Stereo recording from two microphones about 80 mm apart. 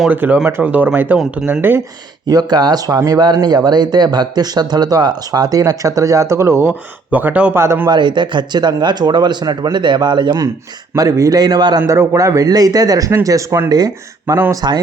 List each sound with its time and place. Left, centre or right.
0.1 s speech: right
2.2 s a man's voice: right
6.7 s speech: right
7.5 s a man's voice: right
7.9 s speech: right
10.9 s speech: right
11.9 s a man's voice: right
13.7 s speech: right